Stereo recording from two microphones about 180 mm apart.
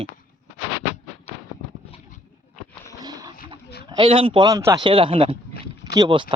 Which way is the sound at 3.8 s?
25° right (ahead or behind).